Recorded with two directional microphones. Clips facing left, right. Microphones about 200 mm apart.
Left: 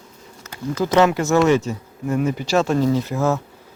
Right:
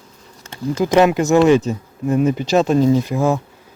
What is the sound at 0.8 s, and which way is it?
Speech, 15° right (ahead or behind).